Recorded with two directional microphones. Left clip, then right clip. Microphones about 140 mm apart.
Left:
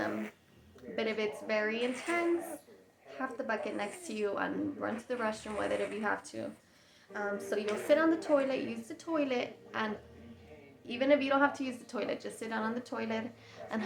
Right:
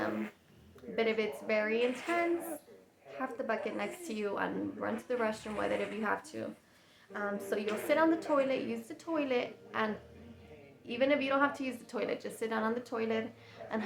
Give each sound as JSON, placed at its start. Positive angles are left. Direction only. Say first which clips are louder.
{"t": 0.9, "sound": "a woman's voice", "louder": "right 2 dB", "side_deg": -15}